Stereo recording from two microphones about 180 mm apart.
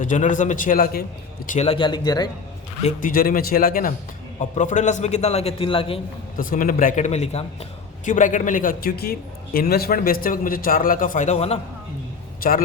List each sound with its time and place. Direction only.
0.0 s a man's voice: 45° left (ahead or behind)
1.5 s a man's voice: 35° left (ahead or behind)
2.8 s a man's voice: 50° left (ahead or behind); by 6.0 s 30° left (ahead or behind)
6.3 s a man's voice: 50° left (ahead or behind)
12.4 s a man's voice: 50° left (ahead or behind)